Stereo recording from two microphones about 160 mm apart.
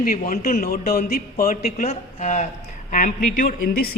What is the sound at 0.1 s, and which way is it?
A man's voice, 60° left (ahead or behind).